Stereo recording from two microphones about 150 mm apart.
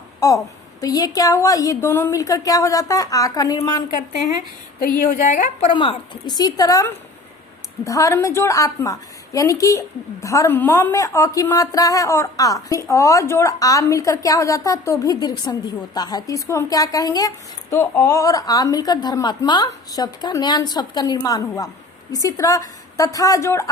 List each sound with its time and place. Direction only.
0.2 s a woman's voice: 25° left (ahead or behind)
4.8 s a woman's voice: 70° left (ahead or behind); by 5.6 s 55° left (ahead or behind)
5.7 s a woman's voice: 35° left (ahead or behind)